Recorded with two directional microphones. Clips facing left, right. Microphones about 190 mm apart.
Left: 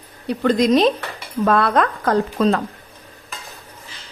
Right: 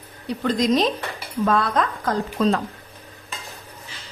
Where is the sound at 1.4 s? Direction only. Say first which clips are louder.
Left 4 dB; 65° left (ahead or behind).